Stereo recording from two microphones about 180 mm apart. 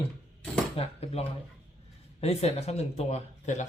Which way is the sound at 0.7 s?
35° left (ahead or behind).